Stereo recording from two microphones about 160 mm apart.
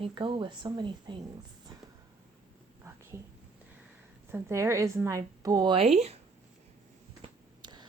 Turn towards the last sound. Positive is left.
turn(degrees=-25)  # may be behind; listen again after turning